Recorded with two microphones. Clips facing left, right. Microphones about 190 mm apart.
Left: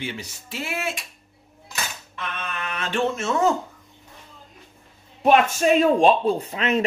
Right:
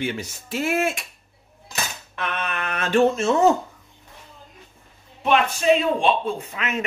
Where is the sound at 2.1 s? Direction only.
65° right (ahead or behind); by 3.5 s 25° right (ahead or behind).